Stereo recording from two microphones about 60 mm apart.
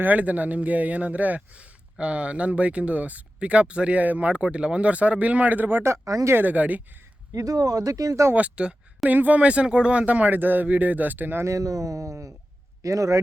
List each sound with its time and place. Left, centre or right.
0.0 s speech: right
5.8 s speech: right
6.4 s speech: right
7.3 s speech: right
8.4 s speech: right
11.4 s a man's voice: right